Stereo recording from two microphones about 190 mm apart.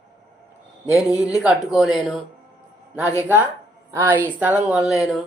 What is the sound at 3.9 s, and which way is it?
A woman's voice, 10° right (ahead or behind).